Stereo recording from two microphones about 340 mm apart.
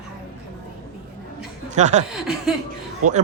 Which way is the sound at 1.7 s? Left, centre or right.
Right.